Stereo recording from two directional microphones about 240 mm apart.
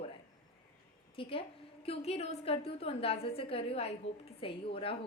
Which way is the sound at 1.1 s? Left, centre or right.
Left.